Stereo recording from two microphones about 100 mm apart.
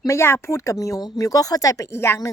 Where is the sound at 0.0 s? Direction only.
30° left (ahead or behind).